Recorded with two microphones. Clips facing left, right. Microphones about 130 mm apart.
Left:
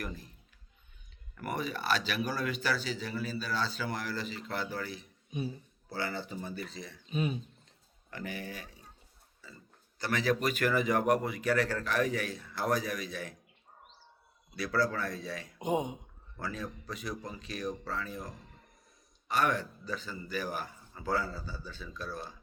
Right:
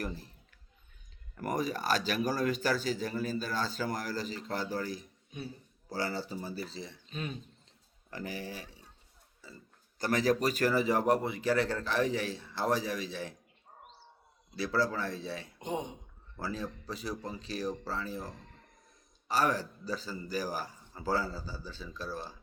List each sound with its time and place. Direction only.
0.0 s a man's voice: 35° right (ahead or behind)
1.4 s speech: 40° right (ahead or behind)
5.3 s a man's voice: 15° left (ahead or behind)
5.9 s speech: 35° right (ahead or behind)
7.1 s speech: 10° left (ahead or behind)
8.1 s speech: 35° right (ahead or behind)
10.0 s speech: 40° right (ahead or behind)
14.5 s speech: 30° right (ahead or behind)
15.5 s speech: 10° left (ahead or behind)
16.4 s speech: 30° right (ahead or behind)
18.3 s a sound: 10° left (ahead or behind)
19.3 s speech: 35° right (ahead or behind)